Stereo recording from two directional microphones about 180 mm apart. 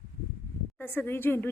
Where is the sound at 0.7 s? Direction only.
10° left (ahead or behind).